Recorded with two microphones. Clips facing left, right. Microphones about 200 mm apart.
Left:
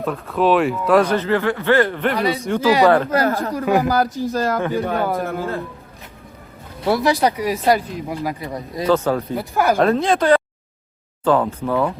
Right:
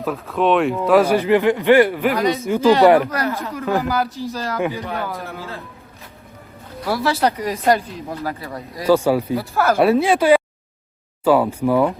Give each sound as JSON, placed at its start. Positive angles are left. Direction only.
{"t": 0.0, "sound": "a man's voice", "side_deg": 0}
{"t": 2.0, "sound": "speech", "side_deg": 0}
{"t": 2.8, "sound": "a man's voice", "side_deg": -15}
{"t": 3.1, "sound": "speech", "side_deg": 30}
{"t": 4.3, "sound": "a man's voice", "side_deg": 50}
{"t": 6.8, "sound": "speech", "side_deg": 20}
{"t": 8.9, "sound": "a man's voice", "side_deg": -10}
{"t": 9.4, "sound": "speech", "side_deg": 15}
{"t": 9.7, "sound": "a man's voice", "side_deg": -15}